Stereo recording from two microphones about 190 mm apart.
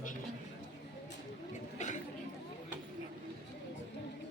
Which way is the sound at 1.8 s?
40° left (ahead or behind).